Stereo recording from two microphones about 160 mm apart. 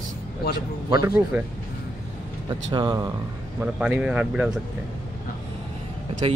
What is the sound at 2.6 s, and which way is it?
Speech, 25° right (ahead or behind).